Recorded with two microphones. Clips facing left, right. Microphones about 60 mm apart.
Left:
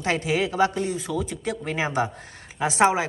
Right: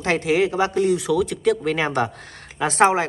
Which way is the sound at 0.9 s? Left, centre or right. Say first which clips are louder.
Right 8 dB; right.